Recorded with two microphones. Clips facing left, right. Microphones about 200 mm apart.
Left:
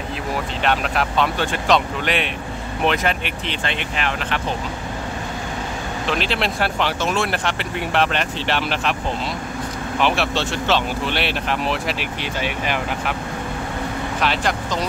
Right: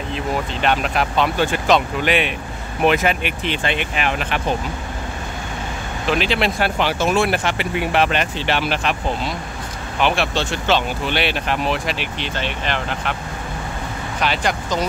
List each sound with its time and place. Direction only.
0.6 s speech: centre (ahead or behind)
6.0 s speech: centre (ahead or behind)
9.9 s speech: centre (ahead or behind)
14.2 s speech: centre (ahead or behind)